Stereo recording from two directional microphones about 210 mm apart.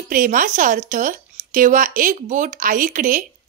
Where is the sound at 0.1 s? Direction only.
40° right (ahead or behind).